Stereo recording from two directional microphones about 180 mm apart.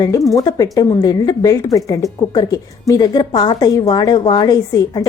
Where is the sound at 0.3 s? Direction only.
20° left (ahead or behind).